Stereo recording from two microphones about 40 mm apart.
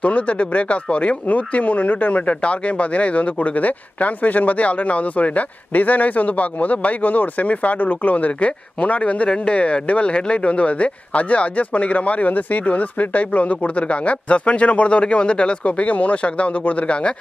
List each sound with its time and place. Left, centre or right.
0.0 s speech: left